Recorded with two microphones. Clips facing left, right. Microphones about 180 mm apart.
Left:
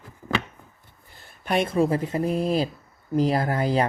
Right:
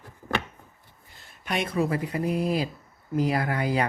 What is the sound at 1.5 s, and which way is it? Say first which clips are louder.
Speech: left 5 dB; 30° left (ahead or behind).